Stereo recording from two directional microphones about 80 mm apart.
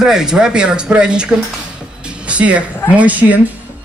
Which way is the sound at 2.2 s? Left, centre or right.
Centre.